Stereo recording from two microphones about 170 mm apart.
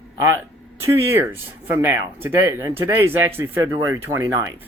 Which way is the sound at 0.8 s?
15° right (ahead or behind).